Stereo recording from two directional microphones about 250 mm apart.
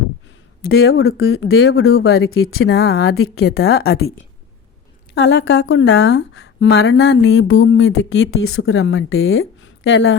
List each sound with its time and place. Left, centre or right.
0.7 s speech: left
2.3 s speech: left
5.1 s a woman's voice: left